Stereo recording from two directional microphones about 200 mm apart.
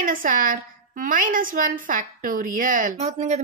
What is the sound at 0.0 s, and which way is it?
A woman's voice, 45° right (ahead or behind).